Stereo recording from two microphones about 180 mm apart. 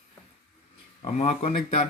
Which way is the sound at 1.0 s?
35° left (ahead or behind).